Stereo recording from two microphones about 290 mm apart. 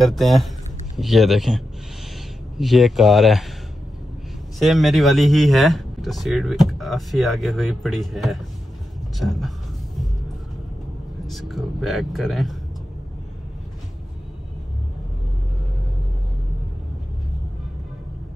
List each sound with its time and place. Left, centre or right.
0.0 s speech: centre
4.6 s speech: centre
11.2 s speech: centre